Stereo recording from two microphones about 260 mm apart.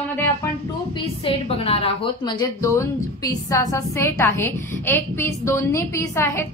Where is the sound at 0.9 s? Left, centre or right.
Left.